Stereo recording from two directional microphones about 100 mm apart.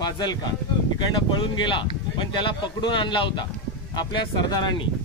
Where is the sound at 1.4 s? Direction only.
55° left (ahead or behind).